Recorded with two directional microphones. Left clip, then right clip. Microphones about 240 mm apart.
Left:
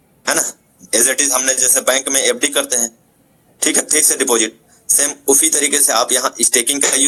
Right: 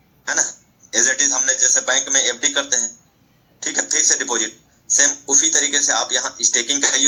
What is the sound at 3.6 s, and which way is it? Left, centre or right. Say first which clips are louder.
A man's voice: left 3 dB; left.